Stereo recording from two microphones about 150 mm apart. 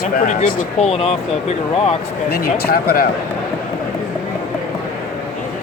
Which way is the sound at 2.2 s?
85° left.